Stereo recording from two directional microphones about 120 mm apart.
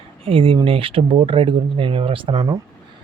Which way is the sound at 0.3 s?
50° right (ahead or behind).